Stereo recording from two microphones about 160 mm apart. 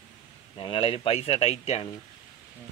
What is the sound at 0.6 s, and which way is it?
Speech, 35° left (ahead or behind).